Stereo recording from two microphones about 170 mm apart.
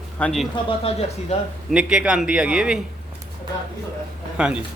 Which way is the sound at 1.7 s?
5° right (ahead or behind).